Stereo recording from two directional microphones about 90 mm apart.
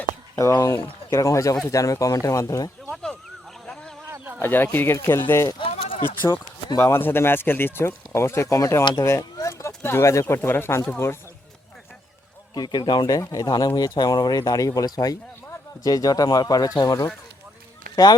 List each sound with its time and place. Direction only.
0.6 s speech: 35° left (ahead or behind)
2.9 s a sound: 5° left (ahead or behind)
4.4 s speech: 25° left (ahead or behind)
5.5 s a sound: 90° left
6.7 s speech: 30° left (ahead or behind)
12.5 s speech: 55° left (ahead or behind)
13.1 s speech: 45° left (ahead or behind)